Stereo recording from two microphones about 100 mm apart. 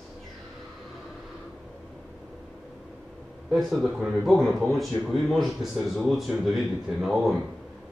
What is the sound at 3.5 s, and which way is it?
A man's voice, centre (ahead or behind).